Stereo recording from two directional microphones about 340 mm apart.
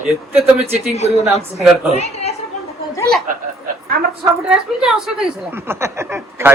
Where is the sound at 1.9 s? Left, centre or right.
Centre.